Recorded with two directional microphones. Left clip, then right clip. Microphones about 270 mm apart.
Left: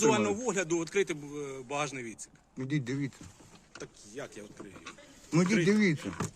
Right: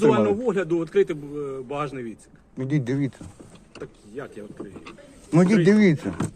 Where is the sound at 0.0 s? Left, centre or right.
Centre.